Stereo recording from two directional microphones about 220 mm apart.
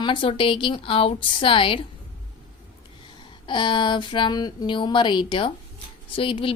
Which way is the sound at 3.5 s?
20° left (ahead or behind).